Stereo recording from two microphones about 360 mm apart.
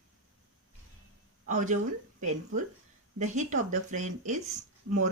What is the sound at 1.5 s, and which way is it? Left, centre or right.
A woman's voice, right.